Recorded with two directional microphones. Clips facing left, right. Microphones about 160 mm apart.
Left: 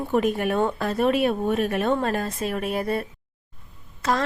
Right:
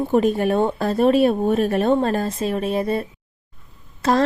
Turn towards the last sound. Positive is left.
turn(degrees=-30)  # may be behind; listen again after turning